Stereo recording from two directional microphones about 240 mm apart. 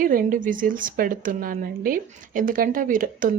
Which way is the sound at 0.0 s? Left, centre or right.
Right.